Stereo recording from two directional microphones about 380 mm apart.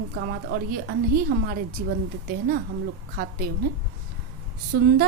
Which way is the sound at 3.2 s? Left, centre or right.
Right.